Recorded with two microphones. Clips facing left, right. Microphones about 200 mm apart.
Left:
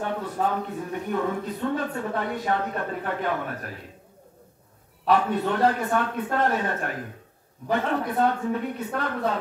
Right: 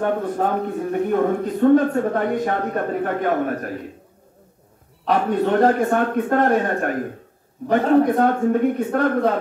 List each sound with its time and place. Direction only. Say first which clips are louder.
0.0 s speech: right 6 dB; 50° right (ahead or behind)
5.0 s speech: right 3 dB; 45° right (ahead or behind)